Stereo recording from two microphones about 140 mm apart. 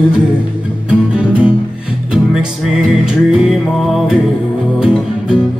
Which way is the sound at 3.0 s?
5° right (ahead or behind).